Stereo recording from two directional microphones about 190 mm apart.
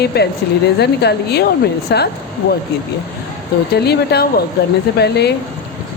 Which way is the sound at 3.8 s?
60° left (ahead or behind).